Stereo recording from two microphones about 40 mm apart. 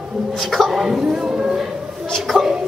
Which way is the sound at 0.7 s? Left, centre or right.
Centre.